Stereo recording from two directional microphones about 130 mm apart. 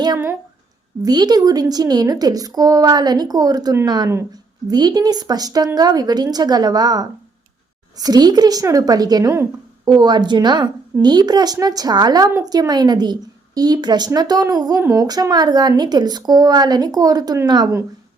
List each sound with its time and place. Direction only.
1.0 s a woman's voice: 30° right (ahead or behind)
4.1 s a woman's voice: 20° right (ahead or behind)
4.7 s a woman's voice: 30° right (ahead or behind)